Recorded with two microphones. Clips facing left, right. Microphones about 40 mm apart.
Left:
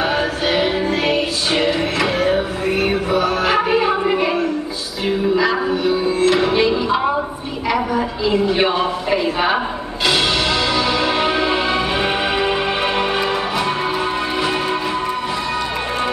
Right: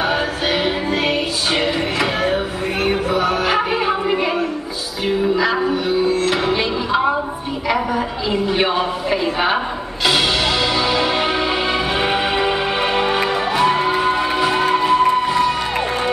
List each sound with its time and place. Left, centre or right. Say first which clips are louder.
0.0 s music: left 1 dB; centre
5.4 s music: left 1 dB; centre
6.0 s music: left 2 dB; centre
7.6 s speech: left 1 dB; centre
10.0 s music: even; centre
14.6 s music: right 5 dB; centre